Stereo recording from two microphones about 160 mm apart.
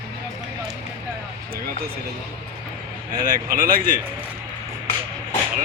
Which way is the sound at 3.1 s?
55° right (ahead or behind).